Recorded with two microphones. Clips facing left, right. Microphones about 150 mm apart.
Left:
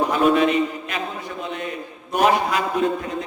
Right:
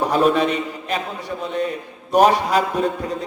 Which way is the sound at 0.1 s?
35° right (ahead or behind).